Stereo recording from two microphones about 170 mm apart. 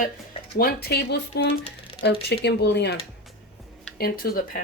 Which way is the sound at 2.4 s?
80° left.